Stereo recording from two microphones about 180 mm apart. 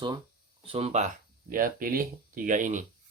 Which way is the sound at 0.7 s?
35° right (ahead or behind).